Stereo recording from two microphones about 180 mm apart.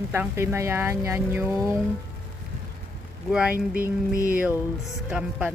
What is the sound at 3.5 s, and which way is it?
Music, 50° right (ahead or behind).